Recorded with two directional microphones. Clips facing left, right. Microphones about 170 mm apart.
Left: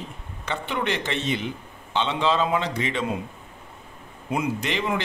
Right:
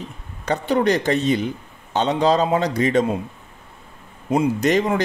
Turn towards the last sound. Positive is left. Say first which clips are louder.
# right 8 dB
turn(degrees=-40)  # may be behind; listen again after turning